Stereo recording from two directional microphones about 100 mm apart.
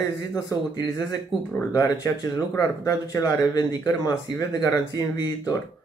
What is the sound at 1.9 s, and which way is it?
Speech, 40° left (ahead or behind).